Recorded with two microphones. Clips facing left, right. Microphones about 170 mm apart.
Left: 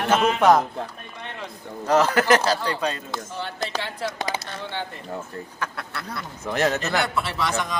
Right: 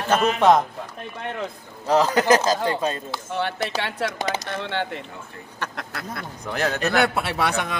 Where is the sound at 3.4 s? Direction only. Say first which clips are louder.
Right 6 dB; 65° right (ahead or behind).